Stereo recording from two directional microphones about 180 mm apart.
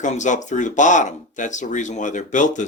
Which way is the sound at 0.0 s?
40° left (ahead or behind).